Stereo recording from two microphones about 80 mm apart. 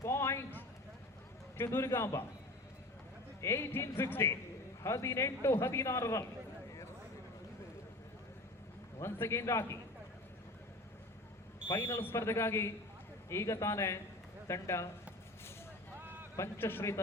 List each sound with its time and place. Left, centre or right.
0.0 s a sound: left
1.5 s a man's voice: left
3.4 s a man's voice: left
9.0 s a man's voice: left
11.7 s a man's voice: left
16.0 s a sound: right
16.3 s a man's voice: left